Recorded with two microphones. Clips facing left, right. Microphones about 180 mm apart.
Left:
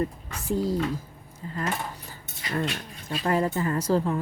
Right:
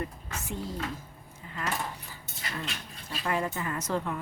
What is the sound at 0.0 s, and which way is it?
Speech, 35° left (ahead or behind).